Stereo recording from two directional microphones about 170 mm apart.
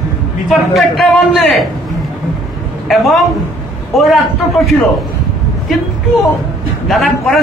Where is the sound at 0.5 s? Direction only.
Centre (ahead or behind).